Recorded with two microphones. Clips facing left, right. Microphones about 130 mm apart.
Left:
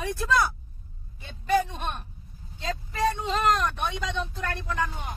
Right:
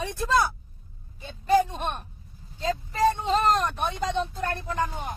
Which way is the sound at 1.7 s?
40° right (ahead or behind).